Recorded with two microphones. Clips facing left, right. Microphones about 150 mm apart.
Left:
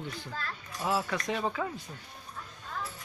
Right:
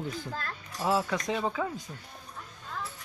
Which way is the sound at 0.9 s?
15° right (ahead or behind).